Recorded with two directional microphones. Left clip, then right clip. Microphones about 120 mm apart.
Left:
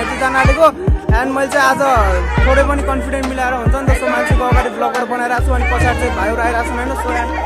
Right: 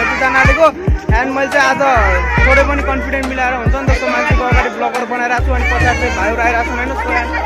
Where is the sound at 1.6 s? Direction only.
20° left (ahead or behind).